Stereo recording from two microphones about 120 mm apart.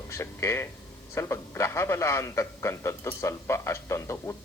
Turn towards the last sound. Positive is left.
turn(degrees=25)  # may be behind; listen again after turning